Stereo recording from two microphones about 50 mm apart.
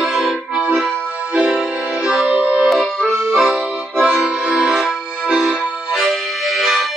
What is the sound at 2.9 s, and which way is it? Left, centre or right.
Accordion, centre.